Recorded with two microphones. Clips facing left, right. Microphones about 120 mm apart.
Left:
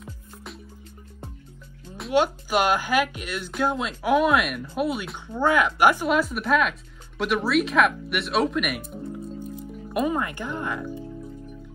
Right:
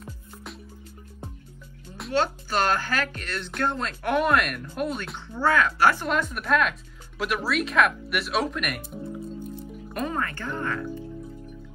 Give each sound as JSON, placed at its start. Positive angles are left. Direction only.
{"t": 0.0, "sound": "music", "side_deg": 0}
{"t": 2.1, "sound": "speech", "side_deg": 15}
{"t": 5.3, "sound": "speech", "side_deg": 15}
{"t": 6.0, "sound": "speech", "side_deg": 5}
{"t": 9.9, "sound": "speech", "side_deg": 10}